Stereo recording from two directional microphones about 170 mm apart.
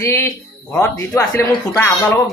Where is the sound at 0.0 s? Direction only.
15° left (ahead or behind).